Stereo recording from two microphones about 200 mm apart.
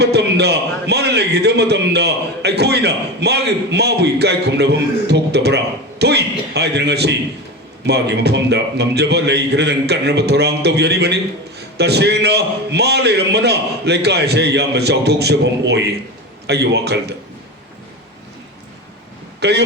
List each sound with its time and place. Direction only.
0.0 s a man's voice: 55° right (ahead or behind)
19.4 s speech: 55° right (ahead or behind)